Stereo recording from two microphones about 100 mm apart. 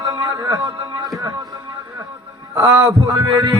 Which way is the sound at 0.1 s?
35° right (ahead or behind).